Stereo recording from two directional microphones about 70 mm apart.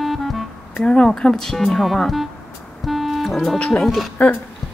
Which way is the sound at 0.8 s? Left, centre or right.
Centre.